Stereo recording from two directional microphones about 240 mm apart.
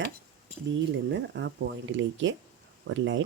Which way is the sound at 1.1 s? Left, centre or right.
Right.